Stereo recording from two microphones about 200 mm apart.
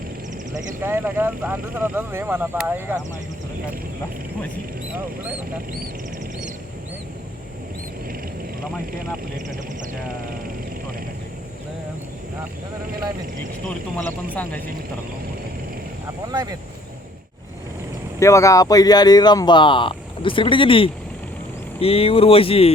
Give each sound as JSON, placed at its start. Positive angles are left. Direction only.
{"t": 0.8, "sound": "speech", "side_deg": -10}
{"t": 16.3, "sound": "speech", "side_deg": -20}
{"t": 18.2, "sound": "speech", "side_deg": 15}